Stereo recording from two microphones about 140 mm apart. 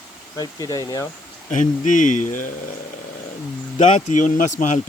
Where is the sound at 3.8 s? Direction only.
60° left (ahead or behind).